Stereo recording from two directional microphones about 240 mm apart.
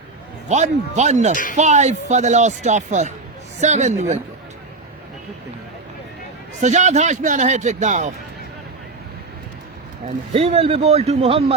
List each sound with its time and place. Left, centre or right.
0.4 s speech: right
6.6 s speech: right
10.3 s speech: right